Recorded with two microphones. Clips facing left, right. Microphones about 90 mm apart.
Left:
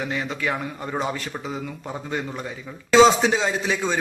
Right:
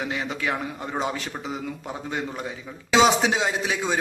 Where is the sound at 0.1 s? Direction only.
15° right (ahead or behind).